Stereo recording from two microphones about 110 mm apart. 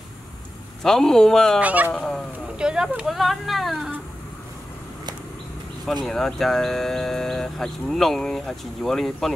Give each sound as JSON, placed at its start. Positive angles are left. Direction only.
{"t": 0.8, "sound": "speech", "side_deg": 5}
{"t": 1.6, "sound": "speech", "side_deg": -15}
{"t": 1.9, "sound": "speech", "side_deg": 5}
{"t": 2.6, "sound": "speech", "side_deg": -5}
{"t": 6.0, "sound": "speech", "side_deg": 5}